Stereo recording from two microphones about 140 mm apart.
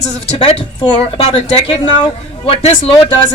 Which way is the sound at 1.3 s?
35° left (ahead or behind).